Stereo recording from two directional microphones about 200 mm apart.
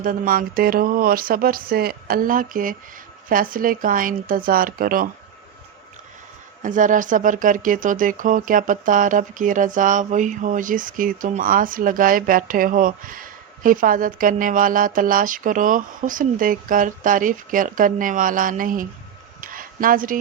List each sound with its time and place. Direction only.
0.0 s speech: 45° right (ahead or behind)
6.6 s speech: 40° right (ahead or behind)
19.4 s a sound: 45° right (ahead or behind)